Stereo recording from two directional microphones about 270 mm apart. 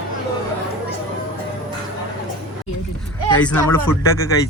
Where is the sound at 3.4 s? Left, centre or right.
Centre.